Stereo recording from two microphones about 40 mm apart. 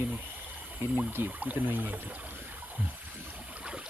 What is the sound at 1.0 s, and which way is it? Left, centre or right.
Speech, right.